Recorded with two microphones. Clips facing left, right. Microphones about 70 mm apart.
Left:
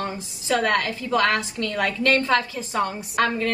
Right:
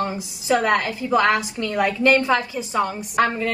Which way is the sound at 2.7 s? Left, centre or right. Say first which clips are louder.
Right 2 dB; centre.